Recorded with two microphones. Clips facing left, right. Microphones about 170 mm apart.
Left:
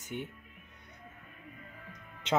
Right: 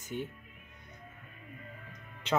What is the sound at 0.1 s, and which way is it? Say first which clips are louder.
Speech: right 2 dB; 20° left (ahead or behind).